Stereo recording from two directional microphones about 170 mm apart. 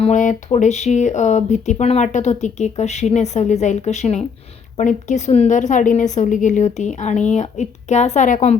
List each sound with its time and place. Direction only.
0.0 s a woman's voice: 45° left (ahead or behind)